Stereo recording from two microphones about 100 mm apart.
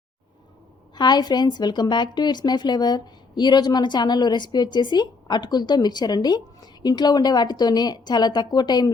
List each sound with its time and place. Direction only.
0.9 s a woman's voice: 45° left (ahead or behind)